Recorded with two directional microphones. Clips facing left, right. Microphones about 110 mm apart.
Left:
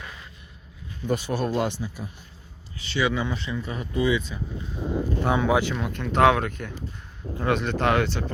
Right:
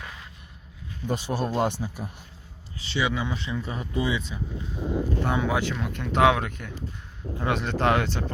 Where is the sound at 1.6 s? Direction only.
45° right (ahead or behind).